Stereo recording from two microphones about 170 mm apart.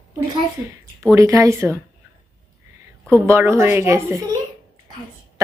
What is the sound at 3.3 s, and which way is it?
Speech, 15° right (ahead or behind).